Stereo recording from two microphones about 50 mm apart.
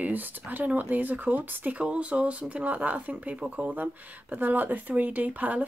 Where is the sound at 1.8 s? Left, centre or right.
Right.